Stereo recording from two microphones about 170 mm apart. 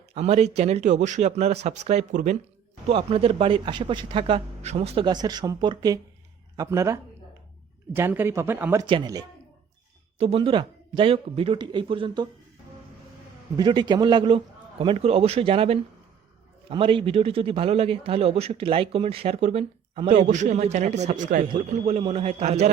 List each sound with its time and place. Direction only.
0.1 s a man's voice: 40° right (ahead or behind)
5.2 s speech: 25° right (ahead or behind)
8.9 s a man's voice: 25° right (ahead or behind)
13.6 s a man's voice: 25° right (ahead or behind); by 21.4 s 50° right (ahead or behind)
21.7 s a man's voice: 40° right (ahead or behind)